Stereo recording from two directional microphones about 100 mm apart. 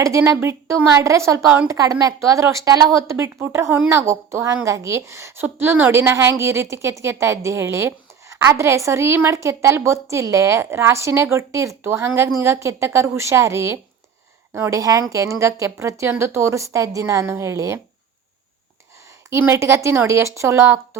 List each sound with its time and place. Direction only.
0.0 s a woman's voice: 30° right (ahead or behind)
19.3 s a woman's voice: 25° right (ahead or behind)